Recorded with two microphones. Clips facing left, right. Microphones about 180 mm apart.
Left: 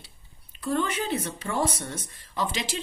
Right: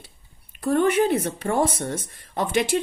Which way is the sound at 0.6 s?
55° right (ahead or behind).